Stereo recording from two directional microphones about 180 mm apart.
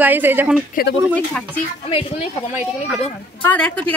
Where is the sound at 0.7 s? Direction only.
55° left (ahead or behind).